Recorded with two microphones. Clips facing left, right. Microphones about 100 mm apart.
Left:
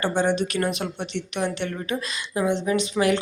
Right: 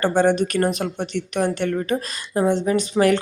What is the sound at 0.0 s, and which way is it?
Speech, 45° right (ahead or behind).